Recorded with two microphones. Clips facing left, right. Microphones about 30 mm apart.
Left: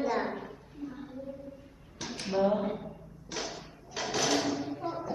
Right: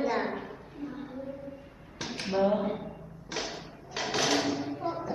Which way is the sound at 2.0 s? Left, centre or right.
Right.